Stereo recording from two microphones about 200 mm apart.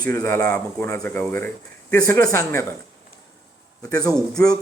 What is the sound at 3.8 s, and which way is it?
Speech, 15° left (ahead or behind).